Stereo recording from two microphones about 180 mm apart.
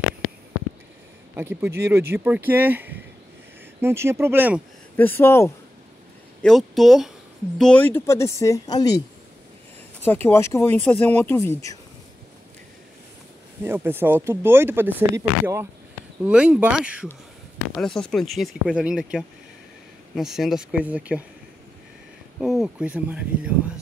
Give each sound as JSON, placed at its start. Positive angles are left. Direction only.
{"t": 1.3, "sound": "speech", "side_deg": -10}
{"t": 4.9, "sound": "speech", "side_deg": 10}
{"t": 6.4, "sound": "speech", "side_deg": 0}
{"t": 10.0, "sound": "speech", "side_deg": 10}
{"t": 13.6, "sound": "speech", "side_deg": -10}
{"t": 22.4, "sound": "speech", "side_deg": -5}